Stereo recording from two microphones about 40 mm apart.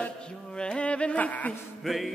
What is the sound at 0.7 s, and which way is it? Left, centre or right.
Music, left.